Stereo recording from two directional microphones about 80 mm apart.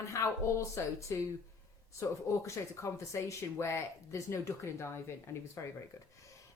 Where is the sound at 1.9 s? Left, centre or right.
Left.